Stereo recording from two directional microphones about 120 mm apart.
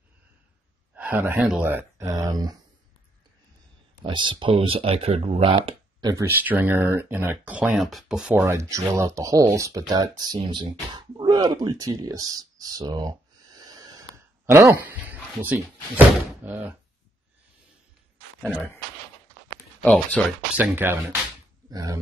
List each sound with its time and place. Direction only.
0.9 s a man's voice: 15° right (ahead or behind); by 2.5 s 30° right (ahead or behind)
4.0 s speech: 40° right (ahead or behind)
5.9 s a sound: 35° right (ahead or behind)
6.2 s speech: 15° right (ahead or behind)
8.4 s speech: 25° right (ahead or behind)
19.8 s speech: 10° left (ahead or behind)
20.5 s speech: 15° right (ahead or behind)
21.6 s speech: 30° right (ahead or behind)